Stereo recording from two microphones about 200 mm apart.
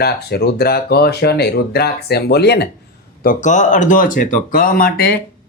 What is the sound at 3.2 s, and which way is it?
Speech, 40° left (ahead or behind).